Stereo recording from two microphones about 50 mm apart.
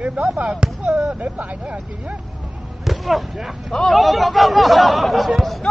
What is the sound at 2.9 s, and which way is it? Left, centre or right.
Speech, centre.